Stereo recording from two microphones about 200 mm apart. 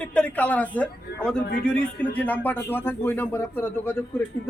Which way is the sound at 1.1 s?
50° left (ahead or behind).